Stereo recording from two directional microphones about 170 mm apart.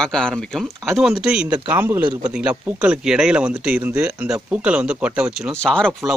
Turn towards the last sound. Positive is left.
turn(degrees=5)  # may be behind; listen again after turning